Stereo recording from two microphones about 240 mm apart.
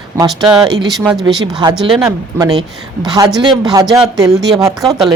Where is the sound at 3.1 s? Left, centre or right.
Centre.